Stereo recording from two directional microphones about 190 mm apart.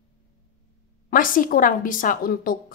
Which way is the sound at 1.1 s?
45° left (ahead or behind).